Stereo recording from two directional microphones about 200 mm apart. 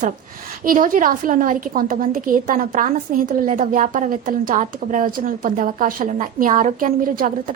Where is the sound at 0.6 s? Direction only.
45° right (ahead or behind).